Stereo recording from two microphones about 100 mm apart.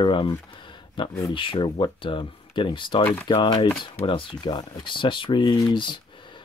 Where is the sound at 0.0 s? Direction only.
50° left (ahead or behind).